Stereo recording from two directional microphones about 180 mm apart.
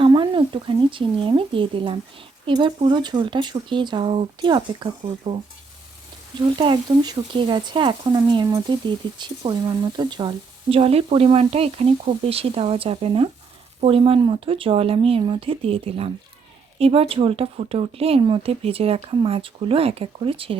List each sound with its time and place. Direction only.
0.0 s speech: 25° right (ahead or behind)
6.4 s speech: 25° right (ahead or behind)